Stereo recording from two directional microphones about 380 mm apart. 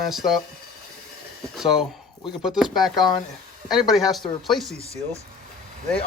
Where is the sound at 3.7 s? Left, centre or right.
Centre.